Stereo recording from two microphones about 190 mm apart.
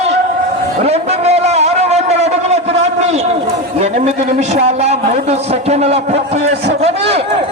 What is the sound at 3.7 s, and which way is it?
A man's voice, 35° right (ahead or behind).